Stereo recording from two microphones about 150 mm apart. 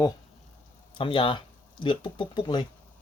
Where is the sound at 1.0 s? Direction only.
35° left (ahead or behind).